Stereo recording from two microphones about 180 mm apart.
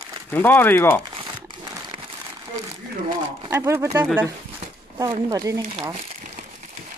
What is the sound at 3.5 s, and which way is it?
Speech, 15° right (ahead or behind).